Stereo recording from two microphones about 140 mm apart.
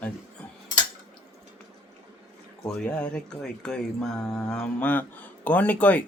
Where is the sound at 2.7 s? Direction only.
5° left (ahead or behind).